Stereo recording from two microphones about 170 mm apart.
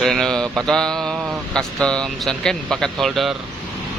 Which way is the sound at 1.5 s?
5° left (ahead or behind).